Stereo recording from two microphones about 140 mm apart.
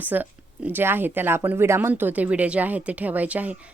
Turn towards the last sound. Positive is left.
turn(degrees=-10)  # may be behind; listen again after turning